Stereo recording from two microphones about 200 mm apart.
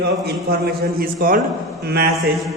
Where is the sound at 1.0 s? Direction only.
45° right (ahead or behind).